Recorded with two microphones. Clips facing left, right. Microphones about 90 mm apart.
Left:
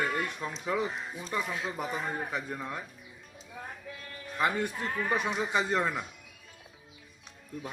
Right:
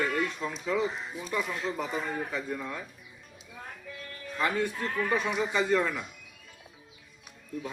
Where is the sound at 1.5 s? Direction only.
5° left (ahead or behind).